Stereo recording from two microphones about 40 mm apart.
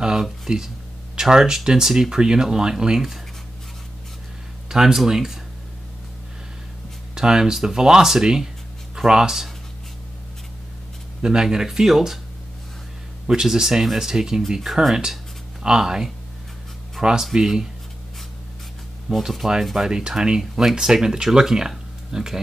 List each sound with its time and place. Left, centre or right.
0.0 s speech: centre
4.6 s speech: centre
7.2 s speech: centre
11.4 s speech: centre
13.3 s speech: centre
17.2 s speech: centre
19.2 s speech: centre
19.9 s speech: centre